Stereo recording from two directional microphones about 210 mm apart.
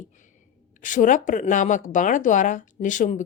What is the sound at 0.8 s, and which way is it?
Speech, 40° left (ahead or behind).